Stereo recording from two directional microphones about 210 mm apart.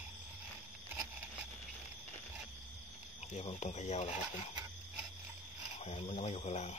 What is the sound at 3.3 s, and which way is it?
Speech, 30° left (ahead or behind).